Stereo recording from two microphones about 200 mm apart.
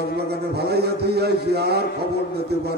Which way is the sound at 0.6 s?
55° right (ahead or behind).